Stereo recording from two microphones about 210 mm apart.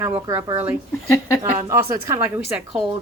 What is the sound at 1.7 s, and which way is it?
Speech, 15° right (ahead or behind).